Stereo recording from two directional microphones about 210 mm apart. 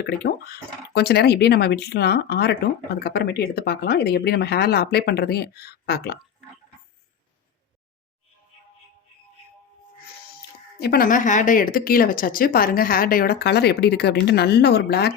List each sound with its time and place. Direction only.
0.0 s speech: 50° left (ahead or behind)
10.8 s speech: 45° left (ahead or behind)